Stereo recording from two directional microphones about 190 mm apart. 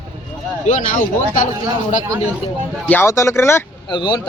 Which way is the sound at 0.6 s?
40° left (ahead or behind).